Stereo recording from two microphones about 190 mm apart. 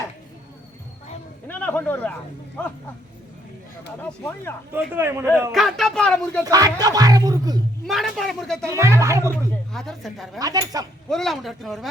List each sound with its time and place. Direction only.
1.5 s a sound: 10° left (ahead or behind)
4.0 s speech: 10° left (ahead or behind)
4.7 s a man's voice: 10° right (ahead or behind)
5.5 s speech: centre (ahead or behind)
6.4 s speech: 20° right (ahead or behind)
7.9 s speech: centre (ahead or behind)
8.6 s a man's voice: 15° right (ahead or behind)
9.7 s speech: centre (ahead or behind)
10.4 s speech: 20° right (ahead or behind)
11.1 s speech: centre (ahead or behind)